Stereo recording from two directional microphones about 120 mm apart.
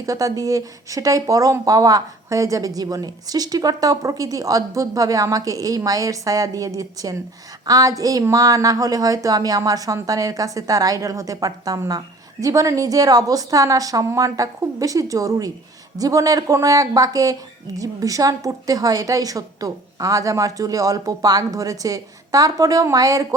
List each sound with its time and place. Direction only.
0.0 s a woman's voice: 30° right (ahead or behind)